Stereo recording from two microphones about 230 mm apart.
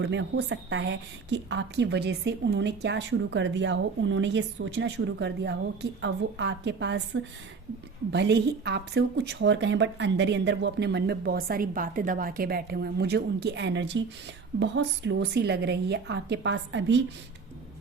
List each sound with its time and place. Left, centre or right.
0.0 s a woman's voice: right